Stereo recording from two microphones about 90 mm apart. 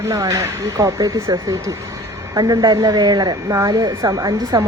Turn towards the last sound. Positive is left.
turn(degrees=-45)  # may be behind; listen again after turning